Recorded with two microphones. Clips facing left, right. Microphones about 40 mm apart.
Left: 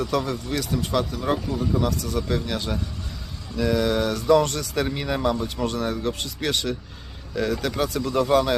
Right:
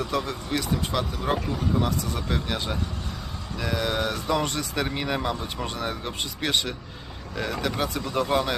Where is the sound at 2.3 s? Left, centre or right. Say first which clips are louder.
Right 1 dB; centre.